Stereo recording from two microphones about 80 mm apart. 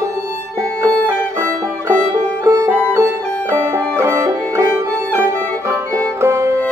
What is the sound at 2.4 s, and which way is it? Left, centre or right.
Music, right.